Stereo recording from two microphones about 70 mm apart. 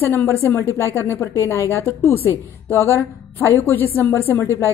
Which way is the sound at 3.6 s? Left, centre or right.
Left.